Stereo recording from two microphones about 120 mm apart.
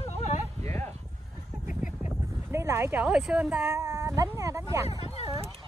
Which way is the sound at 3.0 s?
5° right (ahead or behind).